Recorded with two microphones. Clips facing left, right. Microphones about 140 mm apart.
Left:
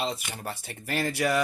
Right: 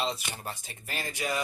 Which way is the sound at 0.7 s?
60° left (ahead or behind).